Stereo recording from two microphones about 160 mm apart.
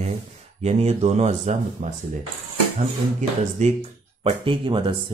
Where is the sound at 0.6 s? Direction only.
40° right (ahead or behind).